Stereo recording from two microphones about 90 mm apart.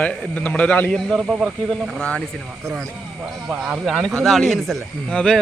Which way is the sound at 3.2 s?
5° right (ahead or behind).